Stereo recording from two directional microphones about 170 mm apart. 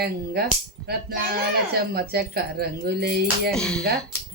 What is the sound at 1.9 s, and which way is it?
Speech, 65° right (ahead or behind).